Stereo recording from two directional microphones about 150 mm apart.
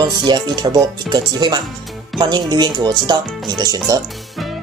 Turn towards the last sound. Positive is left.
turn(degrees=-25)  # may be behind; listen again after turning